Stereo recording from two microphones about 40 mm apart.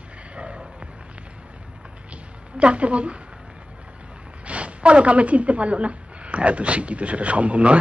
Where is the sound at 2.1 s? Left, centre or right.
Right.